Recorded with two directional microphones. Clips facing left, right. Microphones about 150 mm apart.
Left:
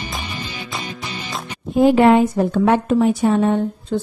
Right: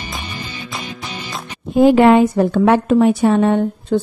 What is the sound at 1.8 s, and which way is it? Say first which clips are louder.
A woman's voice: right 2 dB; 90° right.